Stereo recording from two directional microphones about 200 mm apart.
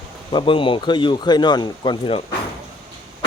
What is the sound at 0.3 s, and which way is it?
Speech, 25° left (ahead or behind).